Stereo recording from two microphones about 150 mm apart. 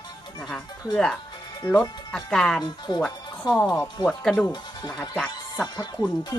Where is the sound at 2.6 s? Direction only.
30° left (ahead or behind).